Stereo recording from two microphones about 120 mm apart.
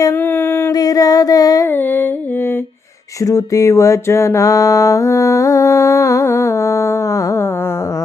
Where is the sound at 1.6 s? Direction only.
15° left (ahead or behind).